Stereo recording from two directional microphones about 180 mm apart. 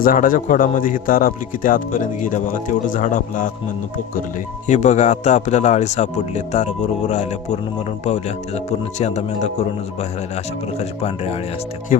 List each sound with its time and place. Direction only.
0.0 s speech: 50° left (ahead or behind)
4.6 s speech: 40° left (ahead or behind)
10.8 s speech: 35° left (ahead or behind)
11.9 s speech: 45° left (ahead or behind)